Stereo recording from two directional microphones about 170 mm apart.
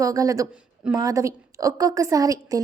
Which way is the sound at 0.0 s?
20° right (ahead or behind).